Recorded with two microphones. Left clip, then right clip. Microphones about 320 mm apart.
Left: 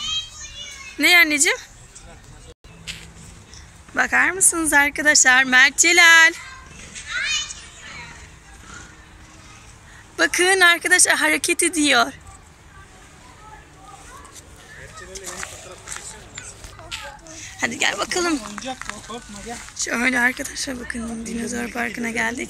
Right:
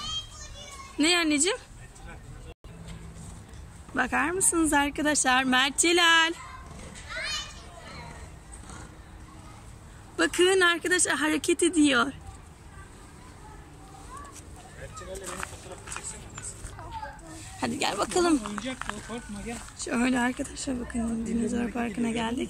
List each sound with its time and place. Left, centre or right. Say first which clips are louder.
0.9 s speech: left 10 dB; centre
3.9 s a woman's voice: left 8 dB; centre
7.1 s children playing: left 10 dB; right
10.1 s speech: left 6 dB; centre
17.6 s a woman's voice: left 7 dB; centre
19.8 s a woman's voice: left 8 dB; centre